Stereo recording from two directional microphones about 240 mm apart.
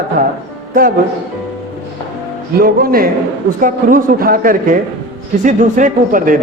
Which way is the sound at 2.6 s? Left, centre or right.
Right.